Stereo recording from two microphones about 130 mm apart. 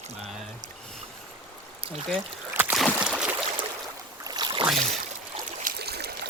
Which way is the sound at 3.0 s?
10° right (ahead or behind).